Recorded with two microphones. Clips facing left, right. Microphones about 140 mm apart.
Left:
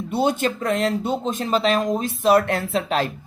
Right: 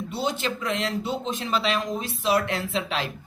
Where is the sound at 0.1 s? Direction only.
55° left (ahead or behind).